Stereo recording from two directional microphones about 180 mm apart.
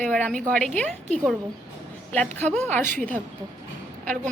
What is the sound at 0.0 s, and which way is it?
Speech, 5° left (ahead or behind).